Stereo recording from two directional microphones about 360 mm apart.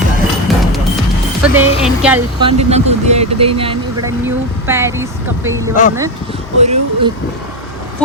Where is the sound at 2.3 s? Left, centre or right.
Centre.